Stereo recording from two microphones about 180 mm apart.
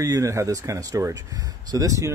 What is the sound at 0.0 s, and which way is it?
Speech, 20° right (ahead or behind).